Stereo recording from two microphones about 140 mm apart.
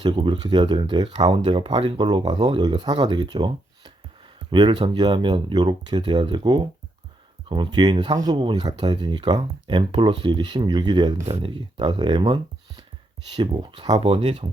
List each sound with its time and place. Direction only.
0.0 s speech: 35° right (ahead or behind)